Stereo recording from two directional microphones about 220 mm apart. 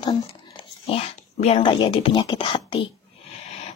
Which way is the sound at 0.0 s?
20° left (ahead or behind).